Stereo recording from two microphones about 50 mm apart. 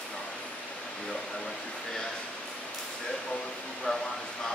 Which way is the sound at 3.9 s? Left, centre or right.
Centre.